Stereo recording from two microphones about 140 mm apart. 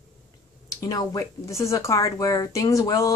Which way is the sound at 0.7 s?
25° left (ahead or behind).